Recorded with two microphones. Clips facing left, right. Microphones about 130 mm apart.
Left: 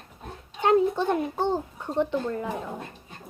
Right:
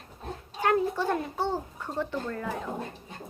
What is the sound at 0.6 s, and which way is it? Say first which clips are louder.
A child's voice: left 4 dB; 20° left (ahead or behind).